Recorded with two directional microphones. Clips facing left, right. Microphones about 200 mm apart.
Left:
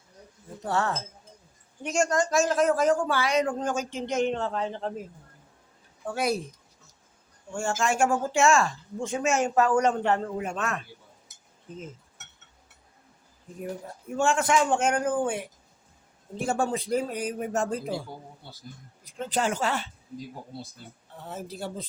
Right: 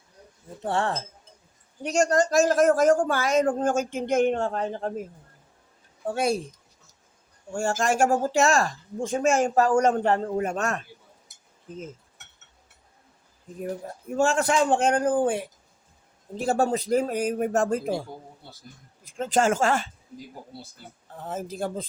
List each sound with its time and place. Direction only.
0.6 s speech: 30° right (ahead or behind); by 4.9 s 45° right (ahead or behind)
6.1 s speech: 30° right (ahead or behind)
7.5 s speech: 40° right (ahead or behind)
14.2 s speech: 35° right (ahead or behind)
19.2 s speech: 45° right (ahead or behind)
21.2 s speech: 50° right (ahead or behind)